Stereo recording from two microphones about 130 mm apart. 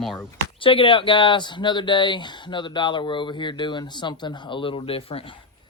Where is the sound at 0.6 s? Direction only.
45° left (ahead or behind).